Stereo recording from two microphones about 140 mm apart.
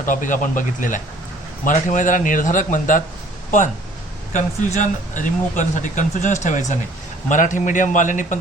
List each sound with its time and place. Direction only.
0.0 s a man's voice: 65° left (ahead or behind)
4.3 s speech: 60° left (ahead or behind)